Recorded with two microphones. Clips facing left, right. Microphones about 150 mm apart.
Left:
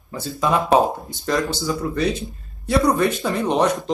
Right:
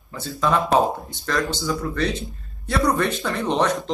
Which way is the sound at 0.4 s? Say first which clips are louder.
Left 2 dB; 10° left (ahead or behind).